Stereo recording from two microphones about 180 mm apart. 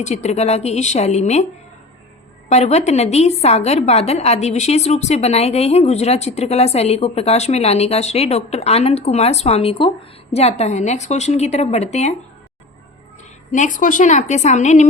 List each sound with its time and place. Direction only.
0.0 s a woman's voice: 40° left (ahead or behind)
2.5 s a woman's voice: 40° left (ahead or behind)
13.5 s a woman's voice: 45° left (ahead or behind)